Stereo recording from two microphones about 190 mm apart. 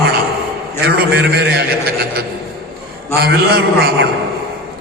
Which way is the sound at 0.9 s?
60° right (ahead or behind).